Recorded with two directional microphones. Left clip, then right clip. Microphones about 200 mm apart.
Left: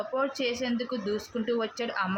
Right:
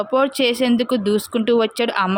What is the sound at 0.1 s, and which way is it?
Speech, 50° right (ahead or behind).